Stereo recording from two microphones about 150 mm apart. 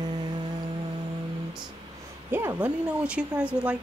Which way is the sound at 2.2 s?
15° right (ahead or behind).